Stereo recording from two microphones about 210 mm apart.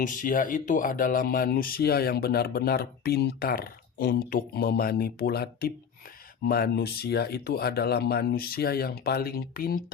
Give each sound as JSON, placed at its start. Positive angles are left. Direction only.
{"t": 0.0, "sound": "speech", "side_deg": 40}